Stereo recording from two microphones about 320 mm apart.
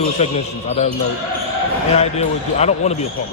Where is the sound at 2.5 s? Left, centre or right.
Centre.